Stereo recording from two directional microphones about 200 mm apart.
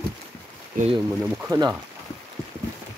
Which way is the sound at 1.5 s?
15° right (ahead or behind).